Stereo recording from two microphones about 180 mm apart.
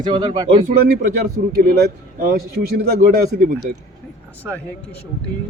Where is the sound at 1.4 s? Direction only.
55° right (ahead or behind).